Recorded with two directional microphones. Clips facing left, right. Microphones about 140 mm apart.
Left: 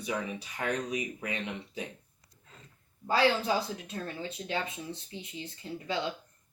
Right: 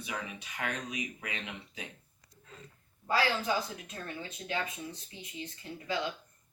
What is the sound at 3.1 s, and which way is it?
Speech, 30° left (ahead or behind).